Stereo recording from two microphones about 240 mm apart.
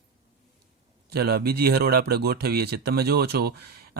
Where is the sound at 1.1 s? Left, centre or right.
Right.